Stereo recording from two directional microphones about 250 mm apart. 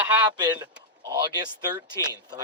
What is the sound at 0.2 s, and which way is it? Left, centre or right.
Speech, centre.